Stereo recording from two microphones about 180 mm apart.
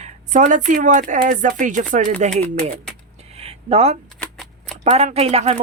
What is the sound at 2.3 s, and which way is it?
Speech, 5° left (ahead or behind).